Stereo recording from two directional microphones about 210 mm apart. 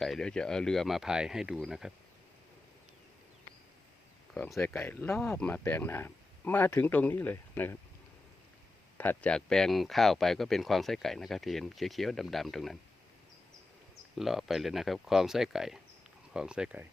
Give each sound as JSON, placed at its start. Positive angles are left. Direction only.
{"t": 0.0, "sound": "speech", "side_deg": 0}
{"t": 4.4, "sound": "speech", "side_deg": 0}
{"t": 9.0, "sound": "speech", "side_deg": 5}
{"t": 14.2, "sound": "speech", "side_deg": 0}